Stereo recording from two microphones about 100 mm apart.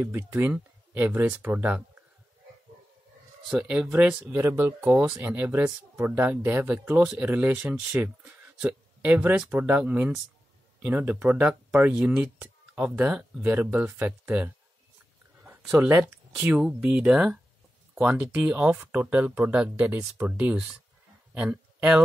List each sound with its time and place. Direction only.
0.0 s speech: 20° right (ahead or behind)
3.5 s speech: 10° right (ahead or behind)
15.8 s speech: 20° right (ahead or behind)
16.8 s speech: 10° right (ahead or behind)